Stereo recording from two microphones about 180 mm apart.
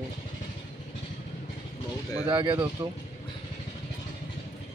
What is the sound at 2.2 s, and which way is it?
Speech, 25° right (ahead or behind).